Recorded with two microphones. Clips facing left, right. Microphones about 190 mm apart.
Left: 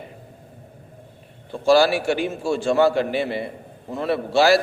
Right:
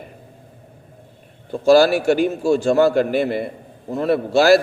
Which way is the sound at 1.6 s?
40° right (ahead or behind).